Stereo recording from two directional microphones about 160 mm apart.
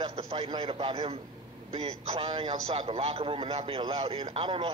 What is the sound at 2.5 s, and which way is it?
A man's voice, 40° right (ahead or behind).